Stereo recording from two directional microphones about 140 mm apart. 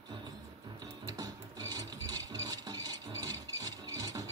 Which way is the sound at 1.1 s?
25° right (ahead or behind).